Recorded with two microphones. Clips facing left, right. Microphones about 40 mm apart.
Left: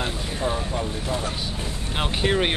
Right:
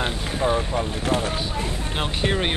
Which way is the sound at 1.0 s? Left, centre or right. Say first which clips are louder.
Right 4 dB; right.